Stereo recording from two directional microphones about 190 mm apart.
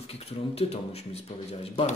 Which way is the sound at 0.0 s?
35° left (ahead or behind).